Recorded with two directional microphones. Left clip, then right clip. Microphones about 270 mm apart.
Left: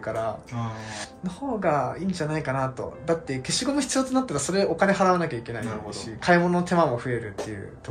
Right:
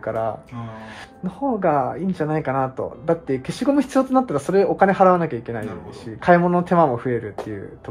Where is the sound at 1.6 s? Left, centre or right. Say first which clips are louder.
Right 3 dB; centre.